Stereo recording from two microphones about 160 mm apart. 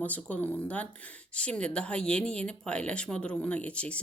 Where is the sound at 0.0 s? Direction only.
10° left (ahead or behind).